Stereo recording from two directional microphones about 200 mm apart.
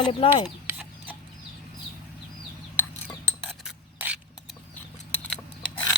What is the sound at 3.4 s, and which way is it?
Mechanisms, 5° right (ahead or behind).